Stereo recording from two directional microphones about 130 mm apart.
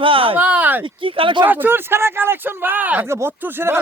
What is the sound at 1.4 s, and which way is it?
Speech, 15° right (ahead or behind).